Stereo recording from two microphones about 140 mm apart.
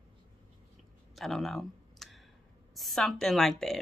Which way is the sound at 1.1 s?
Centre (ahead or behind).